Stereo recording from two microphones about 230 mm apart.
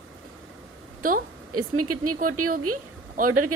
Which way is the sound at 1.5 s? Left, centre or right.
Right.